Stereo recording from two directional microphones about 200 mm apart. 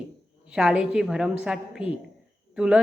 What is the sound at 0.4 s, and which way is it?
A woman's voice, 5° right (ahead or behind).